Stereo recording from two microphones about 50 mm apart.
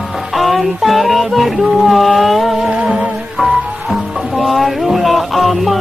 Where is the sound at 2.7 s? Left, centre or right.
Centre.